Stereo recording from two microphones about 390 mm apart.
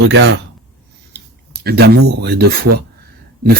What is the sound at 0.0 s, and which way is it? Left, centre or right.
Speech, right.